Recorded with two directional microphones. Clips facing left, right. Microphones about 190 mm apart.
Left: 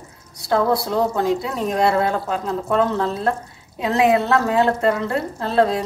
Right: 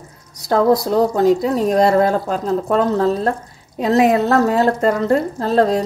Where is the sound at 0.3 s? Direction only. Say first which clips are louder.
Right 4 dB; 40° right (ahead or behind).